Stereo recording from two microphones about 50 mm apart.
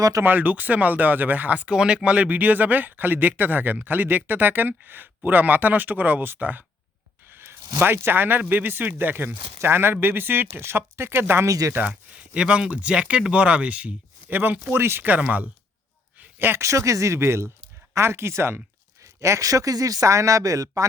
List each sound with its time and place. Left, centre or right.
0.3 s speech: right
7.3 s speech: right
12.3 s speech: right
16.1 s a sound: right
16.6 s speech: right
19.3 s speech: right